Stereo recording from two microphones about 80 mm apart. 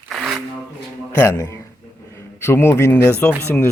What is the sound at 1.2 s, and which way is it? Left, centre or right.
Speech, left.